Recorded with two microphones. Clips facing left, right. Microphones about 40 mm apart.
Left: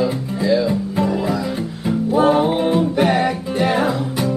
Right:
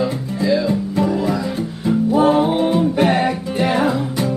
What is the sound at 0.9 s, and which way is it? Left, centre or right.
Music, centre.